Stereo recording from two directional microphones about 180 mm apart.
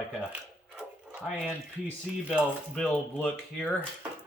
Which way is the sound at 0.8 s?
Centre (ahead or behind).